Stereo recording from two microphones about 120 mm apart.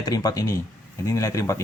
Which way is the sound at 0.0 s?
30° left (ahead or behind).